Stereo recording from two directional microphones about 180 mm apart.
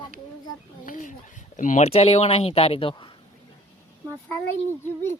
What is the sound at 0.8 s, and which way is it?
Speech, 45° left (ahead or behind).